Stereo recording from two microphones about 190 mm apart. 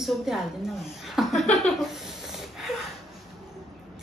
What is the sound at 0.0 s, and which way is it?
Speech, centre (ahead or behind).